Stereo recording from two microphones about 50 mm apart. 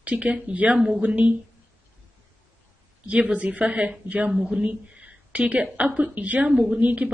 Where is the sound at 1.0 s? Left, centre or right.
Right.